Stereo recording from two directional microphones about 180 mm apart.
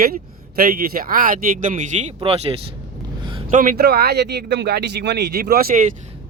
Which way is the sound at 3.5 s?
50° right (ahead or behind).